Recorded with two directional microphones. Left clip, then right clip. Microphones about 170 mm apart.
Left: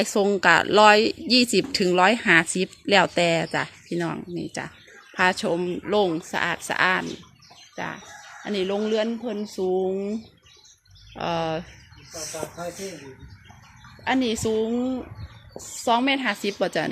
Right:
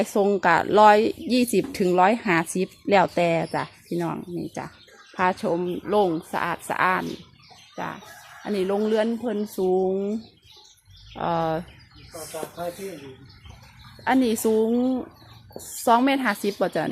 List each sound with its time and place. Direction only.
0.0 s speech: centre (ahead or behind)
8.4 s speech: 10° right (ahead or behind)
14.0 s speech: 20° right (ahead or behind)
16.3 s speech: 10° right (ahead or behind)